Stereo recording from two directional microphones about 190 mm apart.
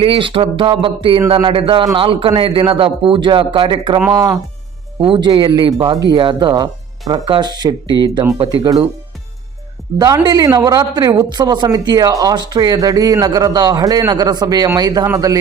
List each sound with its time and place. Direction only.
0.0 s speech: 30° right (ahead or behind)
9.9 s speech: 20° right (ahead or behind)